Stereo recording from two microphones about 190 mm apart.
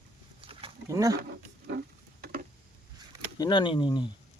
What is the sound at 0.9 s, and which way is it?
Speech, 15° right (ahead or behind).